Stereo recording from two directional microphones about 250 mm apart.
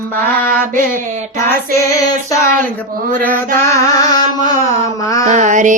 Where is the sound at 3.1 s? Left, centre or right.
Centre.